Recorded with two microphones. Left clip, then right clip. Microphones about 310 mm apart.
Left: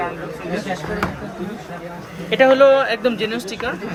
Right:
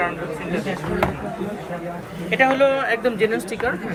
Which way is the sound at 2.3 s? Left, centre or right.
Left.